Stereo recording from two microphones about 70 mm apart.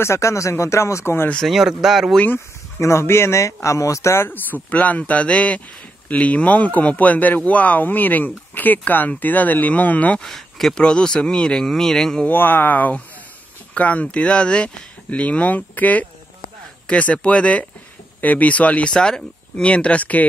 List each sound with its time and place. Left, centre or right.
0.0 s speech: left
1.5 s speech: centre
2.8 s speech: left
10.2 s speech: centre
12.3 s speech: left